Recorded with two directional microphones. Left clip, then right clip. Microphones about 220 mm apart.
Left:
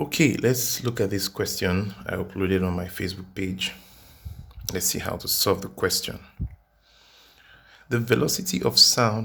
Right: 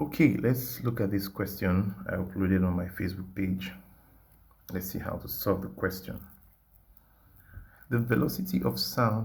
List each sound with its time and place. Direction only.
0.1 s speech: 30° left (ahead or behind)
7.9 s speech: 25° left (ahead or behind)